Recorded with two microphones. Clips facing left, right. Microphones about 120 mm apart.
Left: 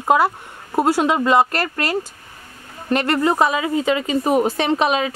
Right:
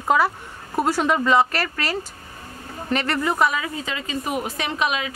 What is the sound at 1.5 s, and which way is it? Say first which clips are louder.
Speech: left 3 dB; 50° left (ahead or behind).